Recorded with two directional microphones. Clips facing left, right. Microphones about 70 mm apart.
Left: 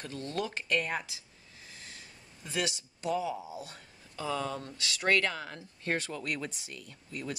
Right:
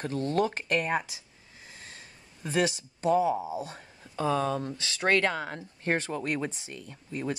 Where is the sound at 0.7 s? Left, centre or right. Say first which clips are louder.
Right 4 dB; right.